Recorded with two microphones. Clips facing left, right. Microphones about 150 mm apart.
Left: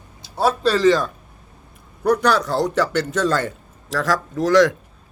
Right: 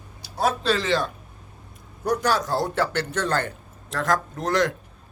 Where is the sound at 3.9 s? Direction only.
90° left.